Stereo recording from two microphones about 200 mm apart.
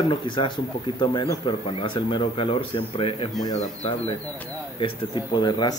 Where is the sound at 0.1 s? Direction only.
25° left (ahead or behind).